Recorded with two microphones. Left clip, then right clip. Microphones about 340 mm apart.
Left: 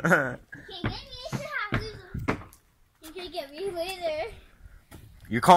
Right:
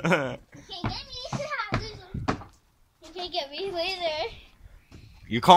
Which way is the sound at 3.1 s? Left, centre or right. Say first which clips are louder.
Right 4 dB; right.